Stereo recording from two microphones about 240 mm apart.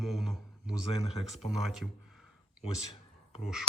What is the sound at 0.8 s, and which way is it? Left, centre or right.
Speech, left.